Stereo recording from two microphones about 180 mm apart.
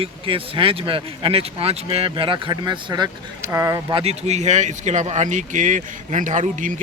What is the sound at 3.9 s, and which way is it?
Speech, 35° right (ahead or behind).